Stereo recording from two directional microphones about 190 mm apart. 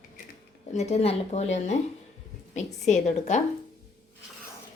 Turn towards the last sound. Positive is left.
turn(degrees=35)  # may be behind; listen again after turning